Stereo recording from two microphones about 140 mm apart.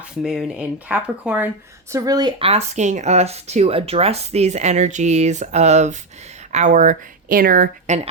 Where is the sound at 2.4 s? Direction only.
45° right (ahead or behind); by 7.9 s 90° right.